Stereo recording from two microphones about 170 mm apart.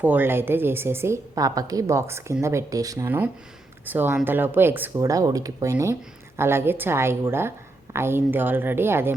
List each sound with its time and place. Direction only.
0.0 s speech: 10° right (ahead or behind)